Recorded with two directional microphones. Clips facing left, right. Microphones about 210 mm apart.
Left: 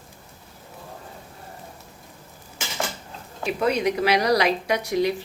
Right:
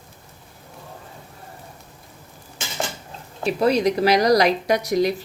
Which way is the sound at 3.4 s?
35° right (ahead or behind).